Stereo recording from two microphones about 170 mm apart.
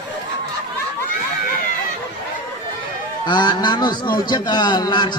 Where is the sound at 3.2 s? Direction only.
25° left (ahead or behind).